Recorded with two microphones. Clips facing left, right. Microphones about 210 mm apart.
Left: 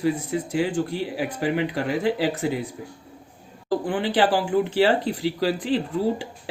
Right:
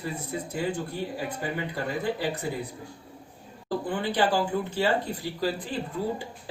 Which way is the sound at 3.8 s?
80° left.